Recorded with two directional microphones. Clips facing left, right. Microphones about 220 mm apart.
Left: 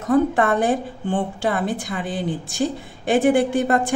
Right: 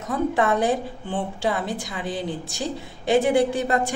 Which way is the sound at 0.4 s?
55° left (ahead or behind).